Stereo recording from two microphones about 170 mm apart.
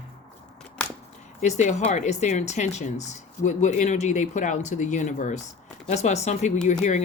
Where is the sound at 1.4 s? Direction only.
45° left (ahead or behind).